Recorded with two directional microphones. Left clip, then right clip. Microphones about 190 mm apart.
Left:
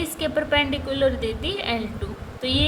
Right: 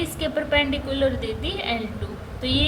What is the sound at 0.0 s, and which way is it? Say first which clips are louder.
A woman's voice: left 1 dB; 35° left (ahead or behind).